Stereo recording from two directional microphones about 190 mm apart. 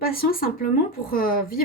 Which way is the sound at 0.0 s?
50° left (ahead or behind).